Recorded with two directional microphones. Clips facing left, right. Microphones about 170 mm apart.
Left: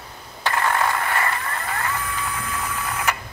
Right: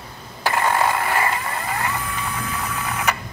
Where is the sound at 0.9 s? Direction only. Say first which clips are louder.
Right 2 dB; 20° right (ahead or behind).